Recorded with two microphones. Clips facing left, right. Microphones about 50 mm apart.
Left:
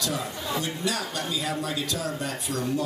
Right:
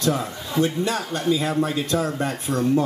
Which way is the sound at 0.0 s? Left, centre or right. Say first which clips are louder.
Right 6 dB; right.